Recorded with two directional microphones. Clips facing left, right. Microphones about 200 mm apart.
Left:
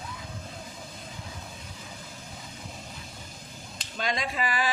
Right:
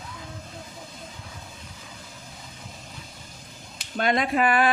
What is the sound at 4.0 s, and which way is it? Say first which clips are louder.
Speech: right 8 dB; 60° right (ahead or behind).